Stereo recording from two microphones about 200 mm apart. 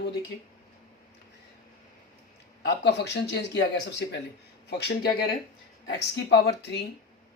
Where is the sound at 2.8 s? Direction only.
55° left (ahead or behind).